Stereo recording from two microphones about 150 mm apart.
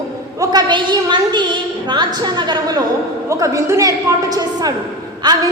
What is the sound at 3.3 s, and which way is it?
A woman's voice, 20° right (ahead or behind).